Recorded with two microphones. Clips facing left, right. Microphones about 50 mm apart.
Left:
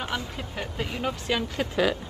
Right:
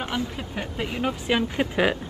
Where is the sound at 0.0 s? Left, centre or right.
Centre.